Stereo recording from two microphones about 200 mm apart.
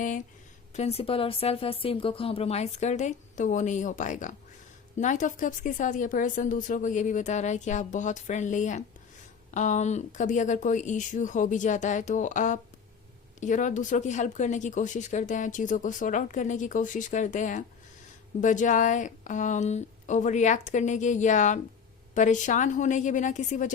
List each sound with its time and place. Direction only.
0.7 s speech: 30° left (ahead or behind)